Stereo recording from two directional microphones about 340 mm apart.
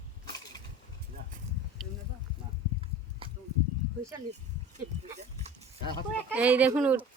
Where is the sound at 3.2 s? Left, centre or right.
Centre.